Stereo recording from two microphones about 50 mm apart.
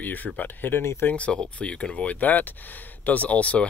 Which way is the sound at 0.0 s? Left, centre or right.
Left.